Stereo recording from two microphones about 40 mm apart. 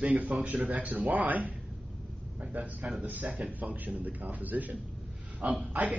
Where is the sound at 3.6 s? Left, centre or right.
Right.